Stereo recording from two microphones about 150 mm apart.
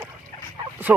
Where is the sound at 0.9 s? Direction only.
15° right (ahead or behind).